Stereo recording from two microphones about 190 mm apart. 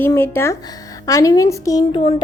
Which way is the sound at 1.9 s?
30° left (ahead or behind).